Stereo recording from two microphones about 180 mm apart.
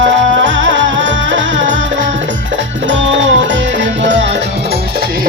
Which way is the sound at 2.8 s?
90° right.